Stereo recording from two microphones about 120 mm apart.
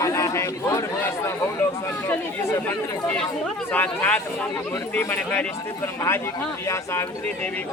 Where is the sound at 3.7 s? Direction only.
15° left (ahead or behind).